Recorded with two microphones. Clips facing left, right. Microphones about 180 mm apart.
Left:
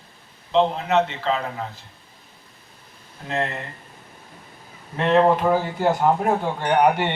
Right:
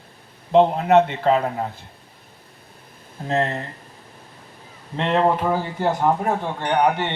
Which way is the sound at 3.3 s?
35° right (ahead or behind).